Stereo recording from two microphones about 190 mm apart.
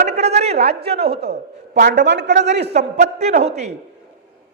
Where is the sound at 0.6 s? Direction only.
60° right (ahead or behind).